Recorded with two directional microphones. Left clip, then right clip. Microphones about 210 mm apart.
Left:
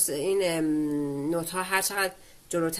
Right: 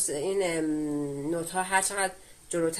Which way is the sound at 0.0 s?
50° left (ahead or behind).